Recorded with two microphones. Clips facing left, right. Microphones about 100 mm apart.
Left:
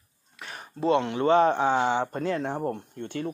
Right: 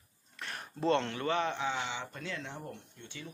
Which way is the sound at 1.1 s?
35° left (ahead or behind).